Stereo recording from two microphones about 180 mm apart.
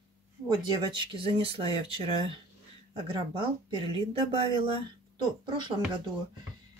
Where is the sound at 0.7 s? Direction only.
25° right (ahead or behind).